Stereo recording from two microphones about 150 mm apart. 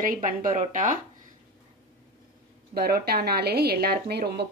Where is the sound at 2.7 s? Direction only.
90° right.